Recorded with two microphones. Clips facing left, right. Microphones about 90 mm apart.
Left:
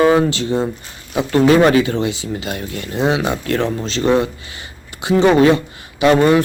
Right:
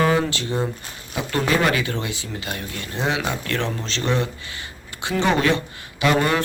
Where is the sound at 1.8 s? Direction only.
20° left (ahead or behind).